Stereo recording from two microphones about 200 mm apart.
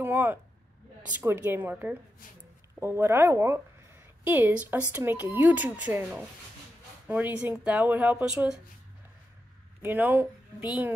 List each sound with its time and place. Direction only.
0.0 s a sound: 10° right (ahead or behind)
1.1 s speech: 10° right (ahead or behind)
9.8 s speech: 10° right (ahead or behind)